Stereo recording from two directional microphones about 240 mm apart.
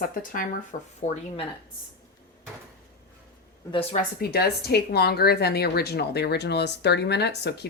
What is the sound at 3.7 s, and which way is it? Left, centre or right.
Speech, left.